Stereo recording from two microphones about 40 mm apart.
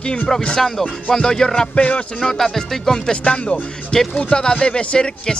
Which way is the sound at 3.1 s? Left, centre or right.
Left.